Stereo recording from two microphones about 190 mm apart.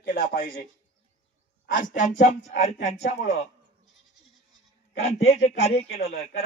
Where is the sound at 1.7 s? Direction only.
40° left (ahead or behind).